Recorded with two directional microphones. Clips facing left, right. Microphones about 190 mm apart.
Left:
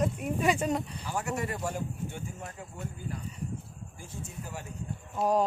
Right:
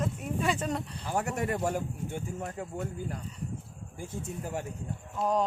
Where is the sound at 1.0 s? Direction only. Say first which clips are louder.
Right 6 dB; 50° right (ahead or behind).